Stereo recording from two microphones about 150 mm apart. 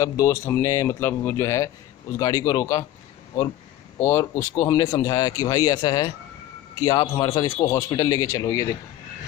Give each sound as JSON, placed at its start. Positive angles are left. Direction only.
{"t": 0.0, "sound": "speech", "side_deg": 20}
{"t": 4.0, "sound": "speech", "side_deg": 20}